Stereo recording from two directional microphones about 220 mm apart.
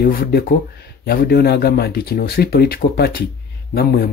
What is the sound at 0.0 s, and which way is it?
Speech, 45° left (ahead or behind).